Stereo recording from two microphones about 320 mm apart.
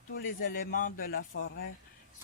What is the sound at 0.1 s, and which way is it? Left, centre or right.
A man's voice, left.